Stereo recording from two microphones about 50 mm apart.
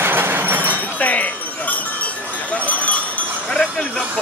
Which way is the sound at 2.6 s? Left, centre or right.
Left.